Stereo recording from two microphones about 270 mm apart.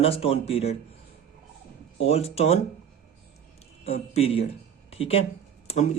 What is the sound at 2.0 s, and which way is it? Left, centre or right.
Speech, left.